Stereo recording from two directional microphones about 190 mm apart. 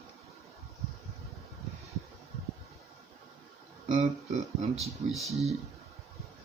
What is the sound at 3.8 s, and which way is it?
Speech, 40° right (ahead or behind).